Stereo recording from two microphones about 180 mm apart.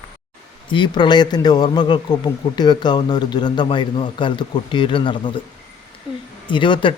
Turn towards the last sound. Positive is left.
turn(degrees=25)  # may be behind; listen again after turning